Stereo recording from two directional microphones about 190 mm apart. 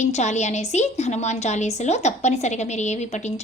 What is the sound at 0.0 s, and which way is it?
A woman's voice, 35° left (ahead or behind).